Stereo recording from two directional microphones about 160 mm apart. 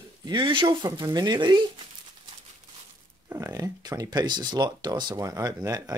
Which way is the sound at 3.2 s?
15° right (ahead or behind).